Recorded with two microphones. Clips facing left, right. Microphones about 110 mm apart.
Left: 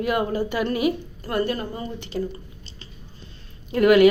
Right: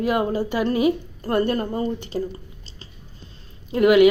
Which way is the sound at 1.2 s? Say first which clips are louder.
Right 3 dB; 40° right (ahead or behind).